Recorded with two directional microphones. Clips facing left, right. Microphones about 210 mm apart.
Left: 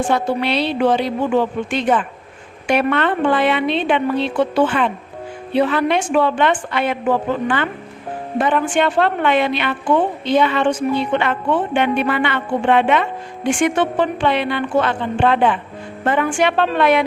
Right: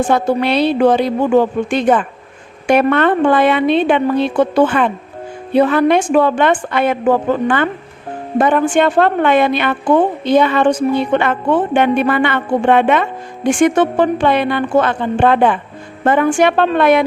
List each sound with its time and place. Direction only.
0.1 s a woman's voice: 45° right (ahead or behind)